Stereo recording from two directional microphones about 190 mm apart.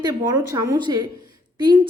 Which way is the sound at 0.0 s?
20° right (ahead or behind).